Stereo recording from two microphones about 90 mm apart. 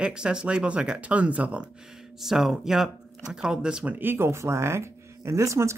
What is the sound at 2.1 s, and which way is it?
Speech, 5° right (ahead or behind).